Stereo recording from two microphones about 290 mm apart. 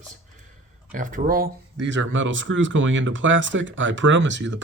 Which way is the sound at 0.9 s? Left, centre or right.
Right.